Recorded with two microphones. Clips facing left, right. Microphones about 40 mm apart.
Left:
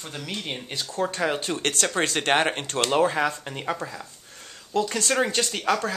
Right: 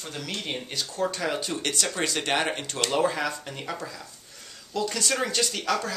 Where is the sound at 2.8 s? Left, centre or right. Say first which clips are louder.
Left 4 dB; left.